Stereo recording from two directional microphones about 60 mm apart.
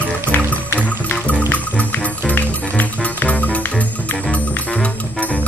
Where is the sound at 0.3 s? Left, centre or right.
Left.